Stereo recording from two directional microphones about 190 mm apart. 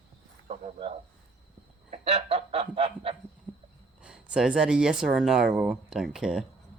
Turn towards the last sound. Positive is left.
turn(degrees=-5)  # may be behind; listen again after turning